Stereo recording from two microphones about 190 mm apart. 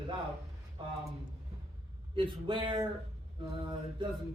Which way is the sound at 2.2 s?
25° right (ahead or behind).